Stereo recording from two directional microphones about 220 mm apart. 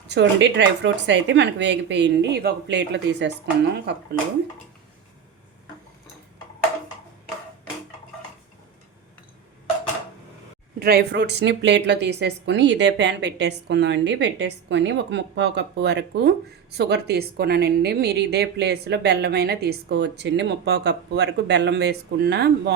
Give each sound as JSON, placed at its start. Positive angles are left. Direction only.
{"t": 0.1, "sound": "speech", "side_deg": -55}
{"t": 10.8, "sound": "speech", "side_deg": -45}